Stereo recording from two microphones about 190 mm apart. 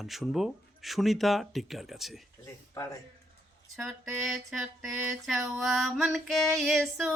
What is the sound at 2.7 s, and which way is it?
Speech, 15° left (ahead or behind).